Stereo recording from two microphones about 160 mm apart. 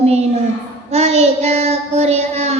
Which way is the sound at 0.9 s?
45° right (ahead or behind).